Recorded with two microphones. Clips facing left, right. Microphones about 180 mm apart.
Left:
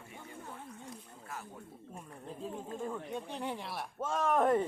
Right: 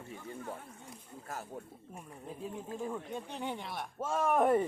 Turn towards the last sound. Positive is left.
turn(degrees=-10)  # may be behind; listen again after turning